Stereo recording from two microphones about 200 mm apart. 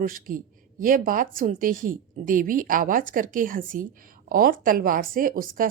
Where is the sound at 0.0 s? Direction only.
45° right (ahead or behind).